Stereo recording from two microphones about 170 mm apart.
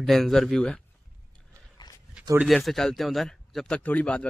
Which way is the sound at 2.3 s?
Centre (ahead or behind).